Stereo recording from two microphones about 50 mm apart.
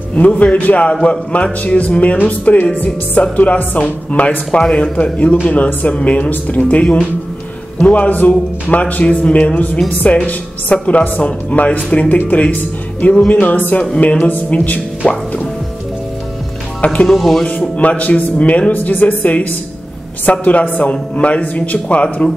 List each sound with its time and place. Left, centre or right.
0.1 s speech: left
16.8 s speech: left
17.1 s speech: centre
17.5 s speech: left